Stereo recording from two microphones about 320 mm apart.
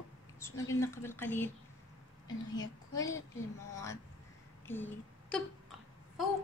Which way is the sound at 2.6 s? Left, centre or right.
Centre.